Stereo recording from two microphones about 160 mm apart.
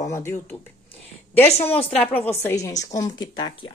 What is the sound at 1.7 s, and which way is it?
A woman's voice, 10° left (ahead or behind).